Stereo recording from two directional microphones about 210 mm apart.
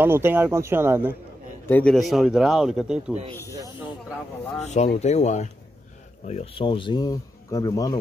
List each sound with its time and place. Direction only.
0.0 s speech: 10° right (ahead or behind)
1.7 s a man's voice: 5° left (ahead or behind)
4.6 s speech: 30° left (ahead or behind); by 8.0 s 15° left (ahead or behind)